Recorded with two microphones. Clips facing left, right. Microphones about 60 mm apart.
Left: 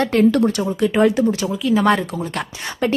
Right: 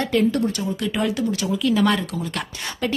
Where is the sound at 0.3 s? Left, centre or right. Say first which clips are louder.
Left 6 dB; left.